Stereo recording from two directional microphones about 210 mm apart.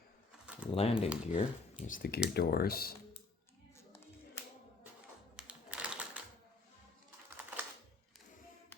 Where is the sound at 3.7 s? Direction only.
10° left (ahead or behind).